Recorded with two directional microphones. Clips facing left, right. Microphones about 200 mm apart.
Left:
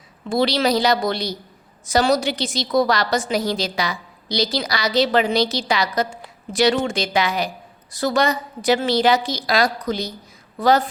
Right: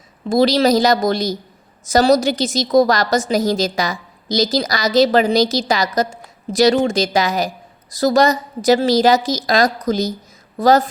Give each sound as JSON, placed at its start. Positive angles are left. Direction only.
{"t": 0.3, "sound": "a woman's voice", "side_deg": -40}